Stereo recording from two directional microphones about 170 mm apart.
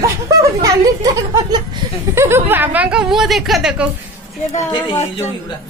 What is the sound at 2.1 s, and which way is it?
A woman's voice, 15° right (ahead or behind).